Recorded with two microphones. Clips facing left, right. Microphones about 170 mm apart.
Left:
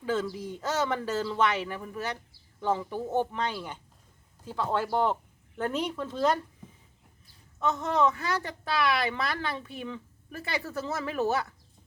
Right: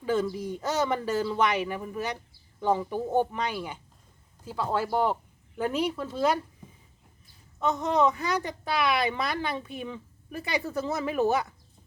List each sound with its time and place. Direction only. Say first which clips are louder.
0.0 s speech: right 3 dB; 15° right (ahead or behind)
7.6 s speech: right 2 dB; 15° right (ahead or behind)